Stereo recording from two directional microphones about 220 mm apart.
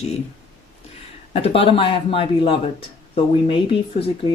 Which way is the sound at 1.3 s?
25° left (ahead or behind).